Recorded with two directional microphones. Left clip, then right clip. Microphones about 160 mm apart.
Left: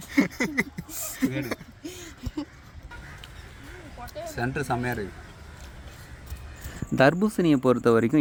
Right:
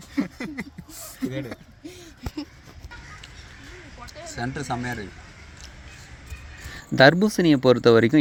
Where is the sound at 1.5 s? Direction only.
50° left (ahead or behind).